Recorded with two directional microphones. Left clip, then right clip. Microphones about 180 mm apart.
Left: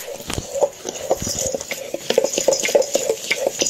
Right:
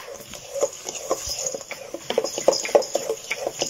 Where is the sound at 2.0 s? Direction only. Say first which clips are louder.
Left 4 dB; 30° left (ahead or behind).